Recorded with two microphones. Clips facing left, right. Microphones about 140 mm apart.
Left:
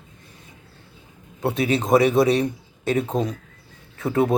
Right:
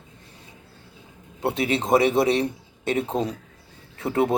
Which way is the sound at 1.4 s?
25° right (ahead or behind).